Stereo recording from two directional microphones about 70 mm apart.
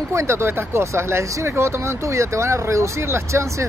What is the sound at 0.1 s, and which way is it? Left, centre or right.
Speech, right.